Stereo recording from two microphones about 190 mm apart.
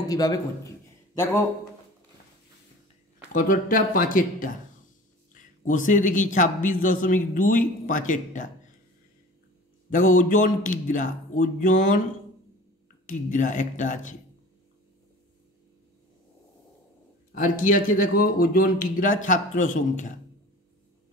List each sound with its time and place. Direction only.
0.1 s a man's voice: 20° left (ahead or behind)
3.3 s a man's voice: 45° left (ahead or behind)
9.8 s a man's voice: 45° left (ahead or behind)
13.0 s speech: 40° left (ahead or behind)
17.3 s a man's voice: 45° left (ahead or behind)